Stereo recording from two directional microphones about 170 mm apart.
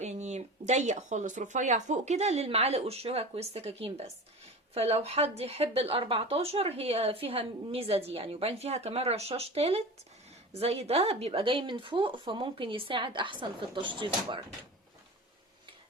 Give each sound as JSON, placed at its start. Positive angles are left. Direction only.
{"t": 0.0, "sound": "speech", "side_deg": -45}